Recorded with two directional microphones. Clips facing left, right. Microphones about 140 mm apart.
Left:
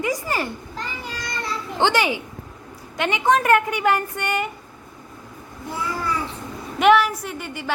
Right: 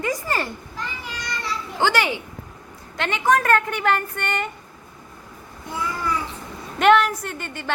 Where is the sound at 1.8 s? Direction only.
20° left (ahead or behind).